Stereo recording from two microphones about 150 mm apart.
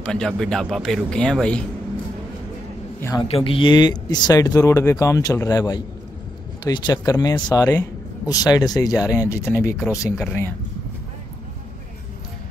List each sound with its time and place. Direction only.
0.0 s speech: 5° left (ahead or behind)
3.0 s a man's voice: 20° left (ahead or behind)
3.3 s speech: 40° left (ahead or behind); by 10.2 s 20° left (ahead or behind)